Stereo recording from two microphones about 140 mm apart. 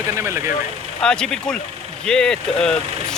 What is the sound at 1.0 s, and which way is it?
Speech, 5° left (ahead or behind).